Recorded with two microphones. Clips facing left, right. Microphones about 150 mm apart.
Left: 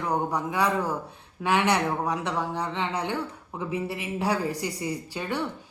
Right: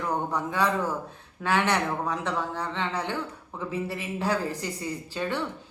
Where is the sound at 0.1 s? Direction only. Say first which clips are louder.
Left 3 dB; 15° left (ahead or behind).